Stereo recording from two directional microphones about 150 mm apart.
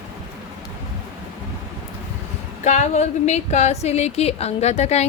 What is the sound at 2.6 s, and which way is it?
A woman's voice, 50° left (ahead or behind).